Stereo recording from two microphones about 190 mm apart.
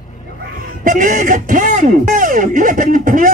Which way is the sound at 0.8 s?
45° right (ahead or behind).